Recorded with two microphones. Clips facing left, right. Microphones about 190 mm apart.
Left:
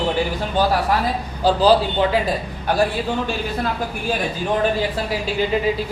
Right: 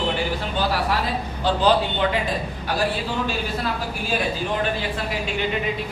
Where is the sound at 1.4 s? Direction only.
35° left (ahead or behind).